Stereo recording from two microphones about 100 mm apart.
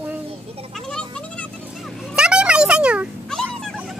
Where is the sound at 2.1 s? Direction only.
10° right (ahead or behind).